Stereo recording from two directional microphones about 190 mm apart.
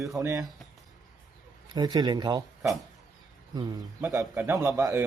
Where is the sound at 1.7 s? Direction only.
20° right (ahead or behind).